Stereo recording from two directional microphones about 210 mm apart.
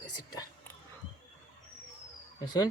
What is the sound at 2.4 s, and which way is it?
Speech, 20° left (ahead or behind).